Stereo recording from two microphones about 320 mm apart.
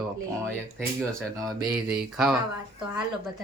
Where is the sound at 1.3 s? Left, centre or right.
Centre.